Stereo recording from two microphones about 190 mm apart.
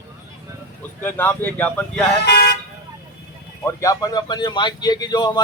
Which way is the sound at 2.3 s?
60° left (ahead or behind).